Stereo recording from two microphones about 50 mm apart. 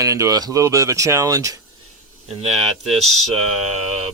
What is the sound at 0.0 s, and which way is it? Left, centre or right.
Speech, right.